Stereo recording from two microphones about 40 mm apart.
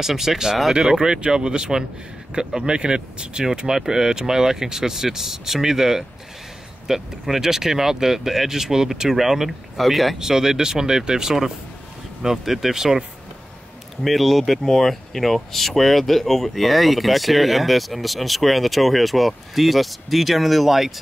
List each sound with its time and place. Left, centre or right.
0.0 s speech: centre
10.1 s speech: centre
14.0 s speech: centre